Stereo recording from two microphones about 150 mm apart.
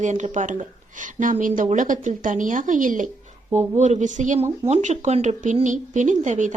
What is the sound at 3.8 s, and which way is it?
Speech, 50° right (ahead or behind).